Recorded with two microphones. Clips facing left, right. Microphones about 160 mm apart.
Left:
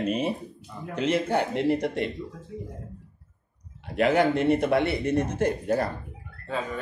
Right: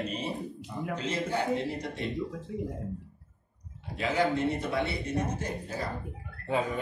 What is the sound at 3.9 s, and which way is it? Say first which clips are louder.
A man's voice: left 6 dB; 65° left (ahead or behind).